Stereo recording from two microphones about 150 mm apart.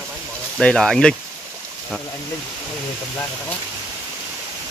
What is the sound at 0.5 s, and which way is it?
Speech, 5° left (ahead or behind).